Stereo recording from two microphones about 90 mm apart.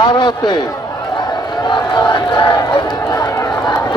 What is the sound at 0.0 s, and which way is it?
Speech, 65° left (ahead or behind).